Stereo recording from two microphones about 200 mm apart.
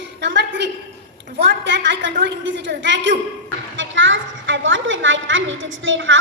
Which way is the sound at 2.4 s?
65° right (ahead or behind).